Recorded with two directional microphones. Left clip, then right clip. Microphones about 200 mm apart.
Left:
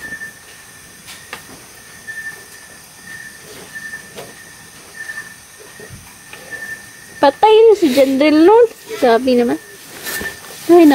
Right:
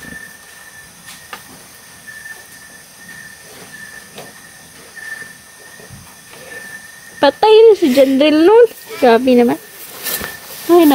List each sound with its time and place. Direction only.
7.2 s speech: 25° right (ahead or behind)